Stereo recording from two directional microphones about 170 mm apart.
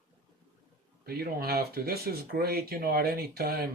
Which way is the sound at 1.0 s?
65° right (ahead or behind).